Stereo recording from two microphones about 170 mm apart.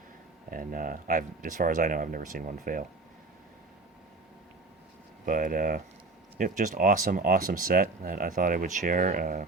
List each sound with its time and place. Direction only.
0.5 s speech: 55° right (ahead or behind)
5.2 s speech: 55° right (ahead or behind)